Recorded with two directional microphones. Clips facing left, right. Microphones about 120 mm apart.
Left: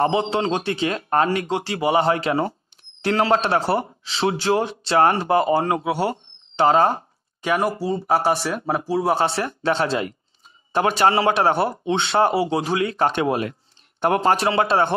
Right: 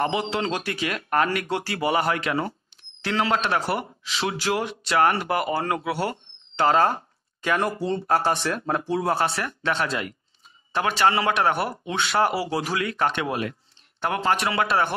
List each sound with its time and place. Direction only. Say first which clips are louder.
0.0 s speech: left 5 dB; 30° left (ahead or behind)